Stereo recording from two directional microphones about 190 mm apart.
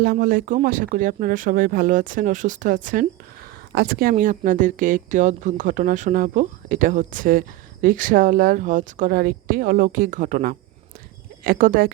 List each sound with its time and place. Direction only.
0.0 s speech: 50° right (ahead or behind)